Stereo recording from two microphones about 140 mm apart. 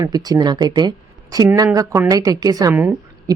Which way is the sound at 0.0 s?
30° right (ahead or behind).